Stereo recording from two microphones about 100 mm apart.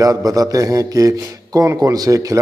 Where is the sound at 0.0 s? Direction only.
40° right (ahead or behind).